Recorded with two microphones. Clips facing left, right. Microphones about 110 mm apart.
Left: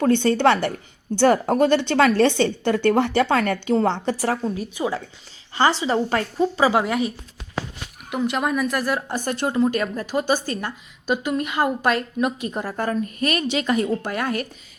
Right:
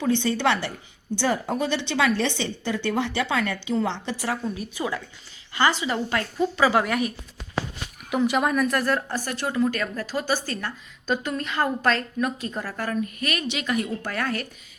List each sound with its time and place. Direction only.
0.0 s a woman's voice: 50° left (ahead or behind); by 7.1 s 20° left (ahead or behind)
8.1 s a woman's voice: centre (ahead or behind); by 14.1 s 30° left (ahead or behind)
14.1 s speech: 20° left (ahead or behind)